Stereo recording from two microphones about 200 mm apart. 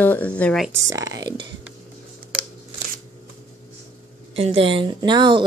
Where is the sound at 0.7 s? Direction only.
15° right (ahead or behind).